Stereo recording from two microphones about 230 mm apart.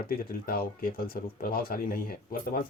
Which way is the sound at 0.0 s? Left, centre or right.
Left.